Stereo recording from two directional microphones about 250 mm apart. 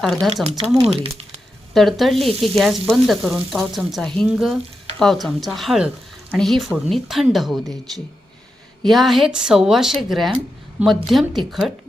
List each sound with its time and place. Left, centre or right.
0.0 s frying: centre
0.7 s speech: right
1.7 s frying: centre